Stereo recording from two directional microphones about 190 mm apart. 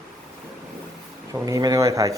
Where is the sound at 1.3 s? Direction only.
20° right (ahead or behind).